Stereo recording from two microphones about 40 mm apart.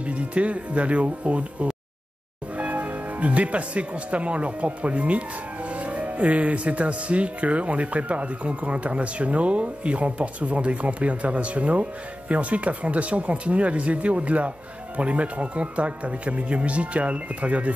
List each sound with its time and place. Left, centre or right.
0.0 s speech: right